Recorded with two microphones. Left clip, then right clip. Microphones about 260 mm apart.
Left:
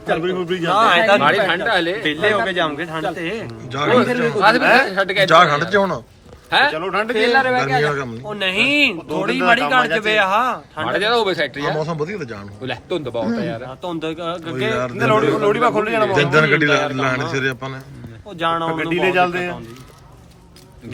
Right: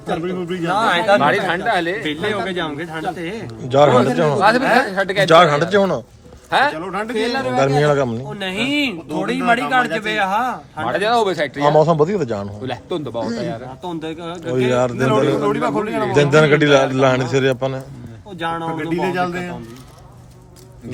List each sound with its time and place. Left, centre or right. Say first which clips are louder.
0.1 s speech: left 3 dB; centre
1.2 s a man's voice: left 1 dB; centre
2.0 s speech: left 4 dB; centre
3.7 s a man's voice: right 4 dB; centre
5.3 s speech: right 2 dB; centre
6.5 s a man's voice: left 1 dB; centre
6.7 s a man's voice: left 3 dB; centre
7.8 s speech: right 4 dB; centre
10.8 s a man's voice: right 1 dB; centre
13.8 s speech: left 3 dB; centre
15.0 s a man's voice: left 6 dB; centre
16.3 s a man's voice: right 5 dB; centre
18.7 s a man's voice: left 3 dB; centre